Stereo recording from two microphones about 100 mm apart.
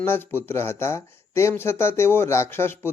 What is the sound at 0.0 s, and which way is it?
A man's voice, 25° left (ahead or behind).